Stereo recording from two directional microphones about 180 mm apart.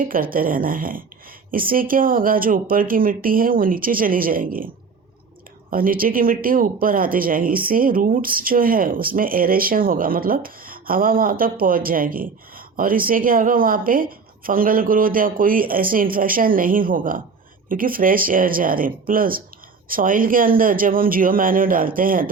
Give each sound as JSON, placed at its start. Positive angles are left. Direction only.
{"t": 0.0, "sound": "speech", "side_deg": -50}
{"t": 5.7, "sound": "speech", "side_deg": -55}